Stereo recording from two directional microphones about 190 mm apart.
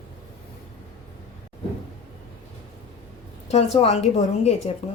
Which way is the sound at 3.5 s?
35° left (ahead or behind).